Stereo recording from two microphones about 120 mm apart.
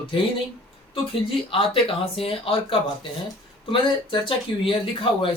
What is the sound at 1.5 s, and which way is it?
Speech, 50° left (ahead or behind).